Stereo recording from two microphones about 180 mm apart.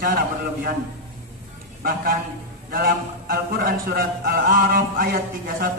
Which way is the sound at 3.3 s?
50° right (ahead or behind).